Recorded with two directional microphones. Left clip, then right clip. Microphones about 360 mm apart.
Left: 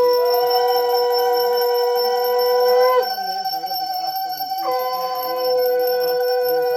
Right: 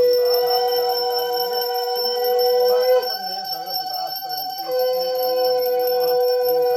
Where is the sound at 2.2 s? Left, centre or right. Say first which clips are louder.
Right 3 dB; centre.